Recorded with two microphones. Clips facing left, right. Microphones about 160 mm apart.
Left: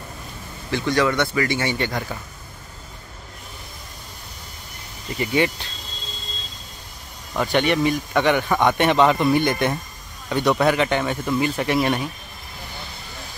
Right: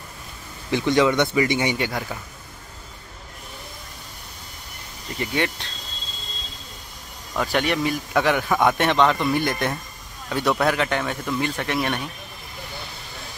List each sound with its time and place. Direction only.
0.7 s speech: 20° right (ahead or behind)
5.2 s a man's voice: 5° left (ahead or behind)
7.3 s a man's voice: centre (ahead or behind)